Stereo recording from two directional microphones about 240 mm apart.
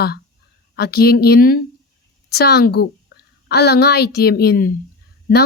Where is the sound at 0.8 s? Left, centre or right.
Left.